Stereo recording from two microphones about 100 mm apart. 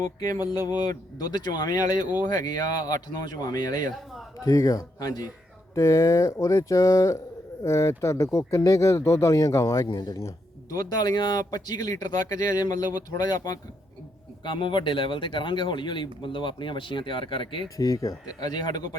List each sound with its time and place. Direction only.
0.0 s speech: 40° left (ahead or behind)
9.9 s speech: 45° left (ahead or behind)
10.2 s speech: 35° left (ahead or behind)
14.4 s speech: 55° left (ahead or behind)
17.7 s speech: 35° left (ahead or behind)